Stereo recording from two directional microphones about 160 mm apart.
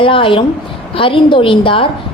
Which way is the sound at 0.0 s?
30° left (ahead or behind).